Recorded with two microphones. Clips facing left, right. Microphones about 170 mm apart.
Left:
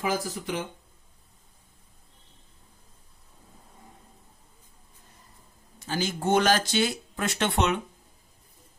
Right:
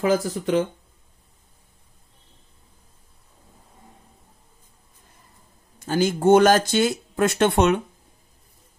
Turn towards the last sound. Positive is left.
turn(degrees=-50)  # may be behind; listen again after turning